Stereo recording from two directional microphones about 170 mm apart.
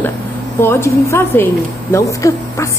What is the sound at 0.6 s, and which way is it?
A woman's voice, 15° left (ahead or behind).